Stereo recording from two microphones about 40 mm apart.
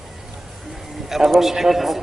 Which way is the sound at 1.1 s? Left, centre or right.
Centre.